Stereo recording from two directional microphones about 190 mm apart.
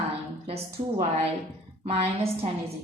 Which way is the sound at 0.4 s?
30° right (ahead or behind).